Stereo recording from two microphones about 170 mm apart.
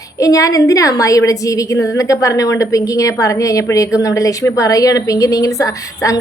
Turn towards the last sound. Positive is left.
turn(degrees=20)  # may be behind; listen again after turning